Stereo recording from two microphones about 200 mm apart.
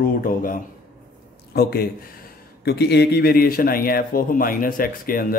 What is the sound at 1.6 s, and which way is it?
A man's voice, 50° left (ahead or behind).